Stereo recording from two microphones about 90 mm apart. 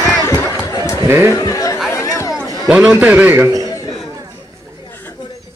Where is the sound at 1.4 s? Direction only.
40° left (ahead or behind).